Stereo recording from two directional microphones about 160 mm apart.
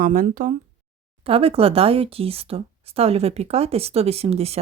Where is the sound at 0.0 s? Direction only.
55° right (ahead or behind).